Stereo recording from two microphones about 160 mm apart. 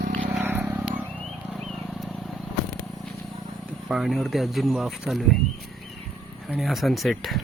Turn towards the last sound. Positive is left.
turn(degrees=0)  # may be behind; listen again after turning